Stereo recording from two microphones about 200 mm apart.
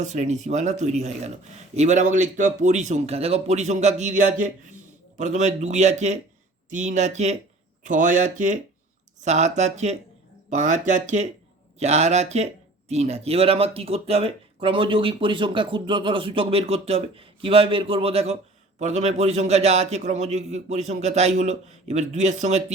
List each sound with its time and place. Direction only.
0.0 s speech: 35° right (ahead or behind)